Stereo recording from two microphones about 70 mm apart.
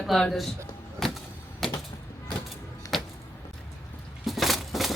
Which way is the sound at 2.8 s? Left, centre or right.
Left.